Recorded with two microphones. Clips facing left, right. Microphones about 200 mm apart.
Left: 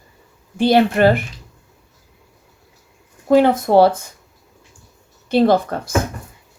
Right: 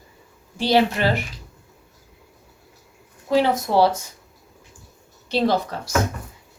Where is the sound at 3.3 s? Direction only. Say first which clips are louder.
Left 6 dB; 50° left (ahead or behind).